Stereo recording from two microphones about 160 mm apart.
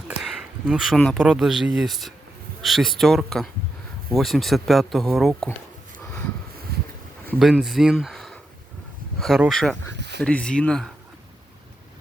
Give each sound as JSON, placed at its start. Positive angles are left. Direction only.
{"t": 0.2, "sound": "speech", "side_deg": -5}
{"t": 6.7, "sound": "a sound", "side_deg": -75}
{"t": 7.3, "sound": "speech", "side_deg": 0}